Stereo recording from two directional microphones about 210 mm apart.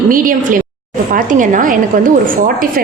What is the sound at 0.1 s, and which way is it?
A woman's voice, 40° right (ahead or behind).